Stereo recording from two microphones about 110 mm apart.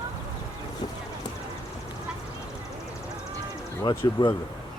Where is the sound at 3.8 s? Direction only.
40° left (ahead or behind).